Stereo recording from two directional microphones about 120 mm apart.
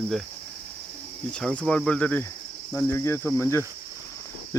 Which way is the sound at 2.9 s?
20° left (ahead or behind).